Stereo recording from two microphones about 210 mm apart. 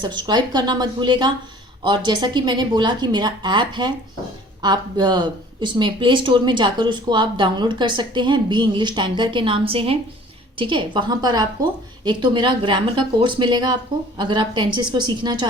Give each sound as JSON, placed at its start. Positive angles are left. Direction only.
{"t": 0.0, "sound": "speech", "side_deg": -20}